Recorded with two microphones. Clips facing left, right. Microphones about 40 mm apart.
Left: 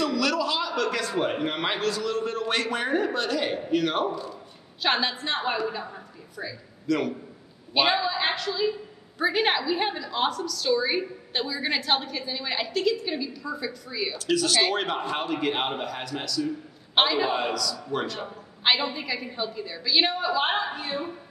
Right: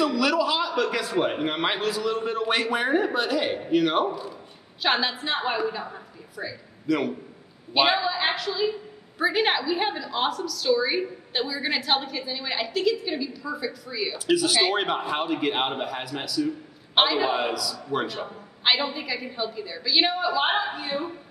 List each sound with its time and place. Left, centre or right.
0.0 s a man's voice: centre